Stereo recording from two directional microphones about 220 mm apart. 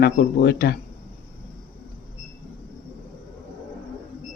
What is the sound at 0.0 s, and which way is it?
Speech, 45° left (ahead or behind).